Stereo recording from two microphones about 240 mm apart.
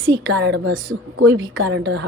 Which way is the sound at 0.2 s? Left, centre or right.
Right.